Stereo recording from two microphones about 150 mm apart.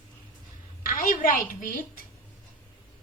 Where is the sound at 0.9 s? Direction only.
70° left (ahead or behind).